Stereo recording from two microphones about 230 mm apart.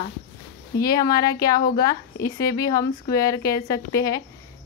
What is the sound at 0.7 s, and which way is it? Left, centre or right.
Speech, centre.